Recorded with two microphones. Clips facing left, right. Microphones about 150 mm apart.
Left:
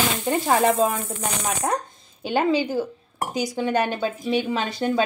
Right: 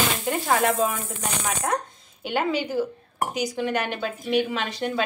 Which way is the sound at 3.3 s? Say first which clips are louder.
Left 4 dB; 30° left (ahead or behind).